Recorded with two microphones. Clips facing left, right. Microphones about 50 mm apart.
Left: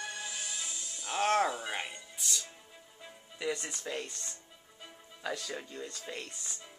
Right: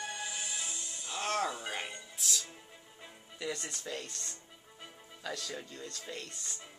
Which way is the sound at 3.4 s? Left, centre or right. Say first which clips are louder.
Left 3 dB; centre.